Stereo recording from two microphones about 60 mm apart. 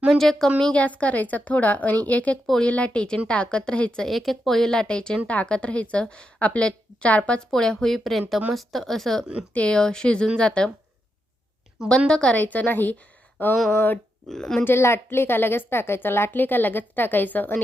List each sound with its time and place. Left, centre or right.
0.1 s speech: centre
0.6 s a woman's voice: left
4.1 s a woman's voice: centre; by 7.4 s left
7.5 s speech: centre
9.5 s speech: centre
11.9 s speech: centre
12.4 s a woman's voice: left
14.3 s speech: centre
14.6 s a woman's voice: left